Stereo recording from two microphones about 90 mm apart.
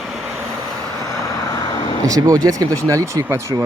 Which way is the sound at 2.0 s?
40° right (ahead or behind).